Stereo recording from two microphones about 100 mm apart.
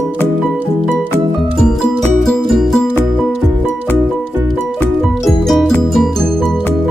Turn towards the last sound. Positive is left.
turn(degrees=0)  # may be behind; listen again after turning